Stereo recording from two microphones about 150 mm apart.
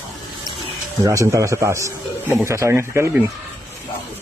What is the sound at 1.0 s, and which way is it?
Speech, 20° right (ahead or behind).